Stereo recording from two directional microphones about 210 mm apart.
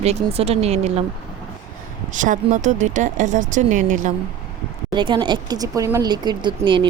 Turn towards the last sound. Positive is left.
turn(degrees=-20)  # may be behind; listen again after turning